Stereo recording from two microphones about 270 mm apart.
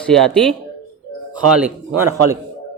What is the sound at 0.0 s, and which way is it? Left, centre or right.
Speech, centre.